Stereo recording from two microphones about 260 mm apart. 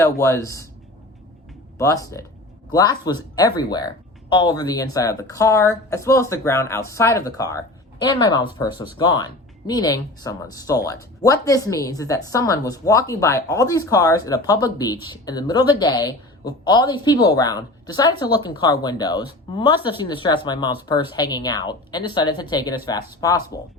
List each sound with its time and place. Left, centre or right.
0.0 s a woman's voice: centre
1.8 s a woman's voice: centre